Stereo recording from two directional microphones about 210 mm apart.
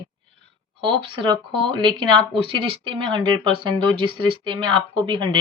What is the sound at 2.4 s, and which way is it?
Speech, 25° right (ahead or behind).